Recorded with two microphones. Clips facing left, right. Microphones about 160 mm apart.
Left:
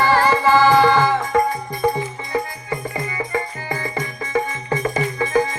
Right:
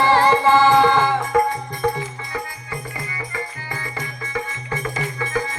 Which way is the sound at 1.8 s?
10° left (ahead or behind).